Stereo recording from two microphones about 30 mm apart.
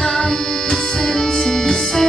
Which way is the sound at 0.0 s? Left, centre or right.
Left.